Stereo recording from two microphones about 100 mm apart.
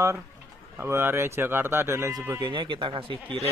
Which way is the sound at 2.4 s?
55° right (ahead or behind).